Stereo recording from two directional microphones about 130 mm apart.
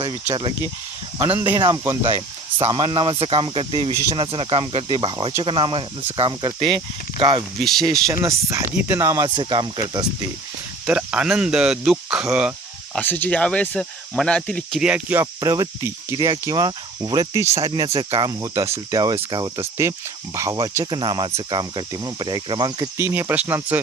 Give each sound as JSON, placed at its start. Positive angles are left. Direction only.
{"t": 1.2, "sound": "speech", "side_deg": -15}
{"t": 2.6, "sound": "speech", "side_deg": -45}
{"t": 7.6, "sound": "speech", "side_deg": 0}
{"t": 7.9, "sound": "speech", "side_deg": -25}
{"t": 10.8, "sound": "speech", "side_deg": -10}
{"t": 13.0, "sound": "speech", "side_deg": 15}
{"t": 14.8, "sound": "speech", "side_deg": -10}
{"t": 15.2, "sound": "speech", "side_deg": -25}
{"t": 17.9, "sound": "speech", "side_deg": -45}
{"t": 18.3, "sound": "speech", "side_deg": -25}
{"t": 23.0, "sound": "speech", "side_deg": -20}